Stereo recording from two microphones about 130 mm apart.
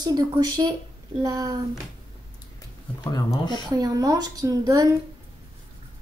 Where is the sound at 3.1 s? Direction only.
30° left (ahead or behind).